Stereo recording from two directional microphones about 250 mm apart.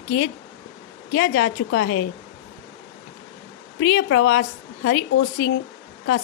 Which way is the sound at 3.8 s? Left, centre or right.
Left.